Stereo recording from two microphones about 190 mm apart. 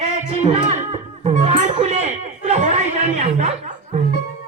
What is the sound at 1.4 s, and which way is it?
Chatter, 40° right (ahead or behind).